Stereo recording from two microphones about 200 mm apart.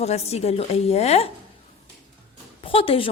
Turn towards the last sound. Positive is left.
turn(degrees=25)  # may be behind; listen again after turning